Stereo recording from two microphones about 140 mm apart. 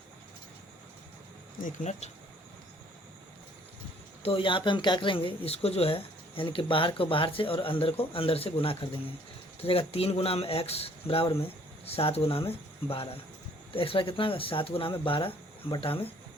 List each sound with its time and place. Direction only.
1.6 s speech: 55° left (ahead or behind)
4.2 s speech: 40° left (ahead or behind)